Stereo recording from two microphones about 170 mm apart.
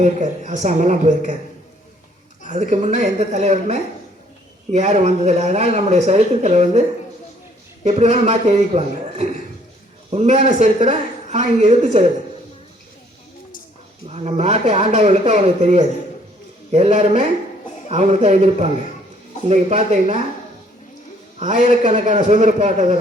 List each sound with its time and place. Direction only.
0.0 s a man's voice: 45° right (ahead or behind)
2.5 s a man's voice: 45° right (ahead or behind)
7.9 s a man's voice: 40° right (ahead or behind)
14.1 s speech: 40° right (ahead or behind)
21.3 s a man's voice: 45° right (ahead or behind)